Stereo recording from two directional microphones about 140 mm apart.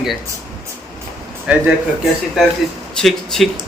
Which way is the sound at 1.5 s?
5° right (ahead or behind).